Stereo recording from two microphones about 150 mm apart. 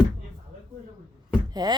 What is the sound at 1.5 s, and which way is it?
Knock, 25° right (ahead or behind).